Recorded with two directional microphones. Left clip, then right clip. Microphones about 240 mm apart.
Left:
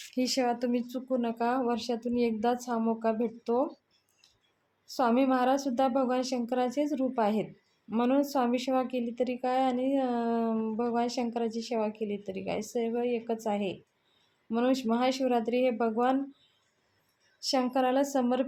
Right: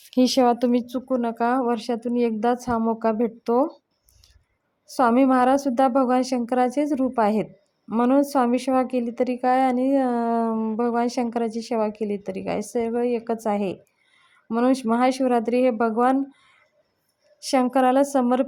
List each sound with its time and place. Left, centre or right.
0.1 s speech: right
4.9 s a woman's voice: right
17.4 s a woman's voice: right